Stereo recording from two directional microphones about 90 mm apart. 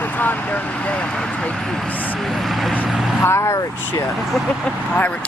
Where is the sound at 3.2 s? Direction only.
30° left (ahead or behind).